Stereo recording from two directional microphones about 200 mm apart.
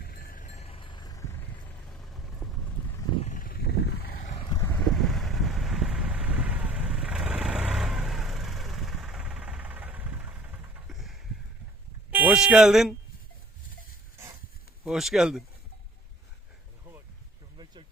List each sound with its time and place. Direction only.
0.0 s a sound: 50° left (ahead or behind); by 1.2 s 20° left (ahead or behind)
1.9 s vehicle: centre (ahead or behind)
3.2 s a sound: 40° left (ahead or behind)
4.9 s vehicle: centre (ahead or behind)
12.1 s speech: 5° right (ahead or behind)
14.8 s speech: centre (ahead or behind)